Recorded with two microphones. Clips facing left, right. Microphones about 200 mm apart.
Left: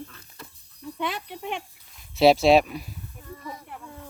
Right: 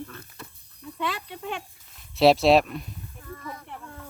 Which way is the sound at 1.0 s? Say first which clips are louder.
Even; 20° left (ahead or behind).